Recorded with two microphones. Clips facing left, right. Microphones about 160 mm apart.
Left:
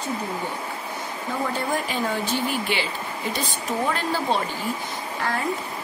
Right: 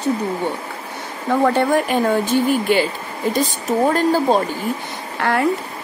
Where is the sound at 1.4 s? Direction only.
70° right (ahead or behind); by 4.3 s 45° right (ahead or behind).